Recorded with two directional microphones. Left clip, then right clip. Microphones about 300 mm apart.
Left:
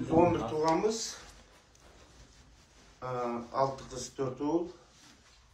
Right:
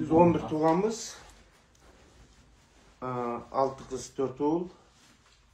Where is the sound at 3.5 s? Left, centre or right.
Right.